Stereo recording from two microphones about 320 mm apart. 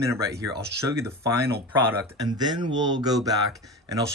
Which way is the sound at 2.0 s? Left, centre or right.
Centre.